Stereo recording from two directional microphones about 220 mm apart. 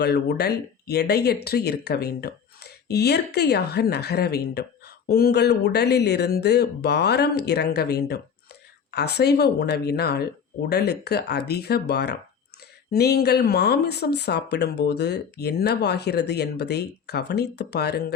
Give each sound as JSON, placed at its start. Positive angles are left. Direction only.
{"t": 0.0, "sound": "speech", "side_deg": 50}